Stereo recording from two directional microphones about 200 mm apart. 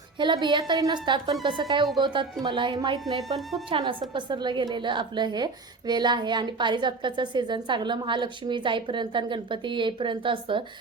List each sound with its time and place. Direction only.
0.2 s speech: 25° right (ahead or behind)
3.2 s speech: centre (ahead or behind)
3.7 s speech: 25° right (ahead or behind)